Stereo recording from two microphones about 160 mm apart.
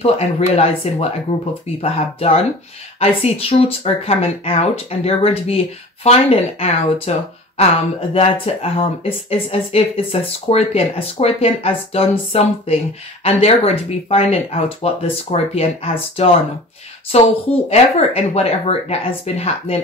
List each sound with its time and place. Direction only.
0.0 s speech: 40° left (ahead or behind)